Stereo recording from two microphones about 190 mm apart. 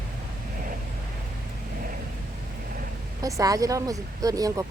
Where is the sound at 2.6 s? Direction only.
50° right (ahead or behind).